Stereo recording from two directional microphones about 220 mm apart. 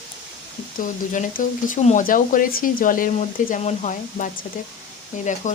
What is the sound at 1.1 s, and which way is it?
Speech, 35° left (ahead or behind).